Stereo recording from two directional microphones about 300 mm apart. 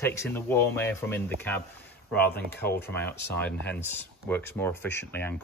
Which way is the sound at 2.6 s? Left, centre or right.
Left.